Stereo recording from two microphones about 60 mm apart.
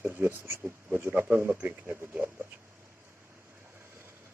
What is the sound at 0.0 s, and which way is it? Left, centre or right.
Speech, right.